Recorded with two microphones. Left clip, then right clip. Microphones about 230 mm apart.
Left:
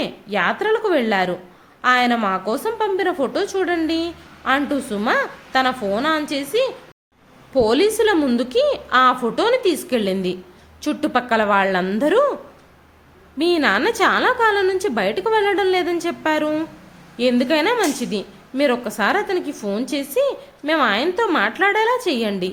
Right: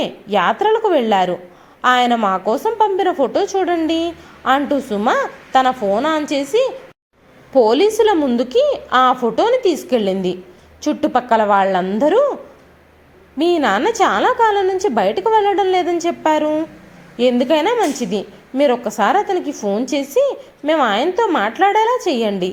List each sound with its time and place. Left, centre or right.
0.0 s a woman's voice: centre
13.4 s a woman's voice: centre